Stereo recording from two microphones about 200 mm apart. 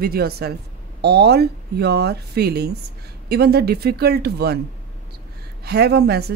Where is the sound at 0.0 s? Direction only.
50° right (ahead or behind).